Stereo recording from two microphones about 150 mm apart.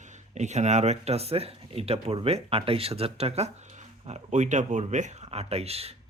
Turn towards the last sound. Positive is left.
turn(degrees=-40)  # may be behind; listen again after turning